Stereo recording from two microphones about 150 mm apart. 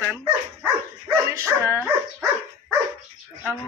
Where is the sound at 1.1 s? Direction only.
20° right (ahead or behind).